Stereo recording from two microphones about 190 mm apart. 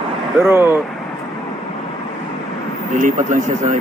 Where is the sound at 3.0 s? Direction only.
45° right (ahead or behind).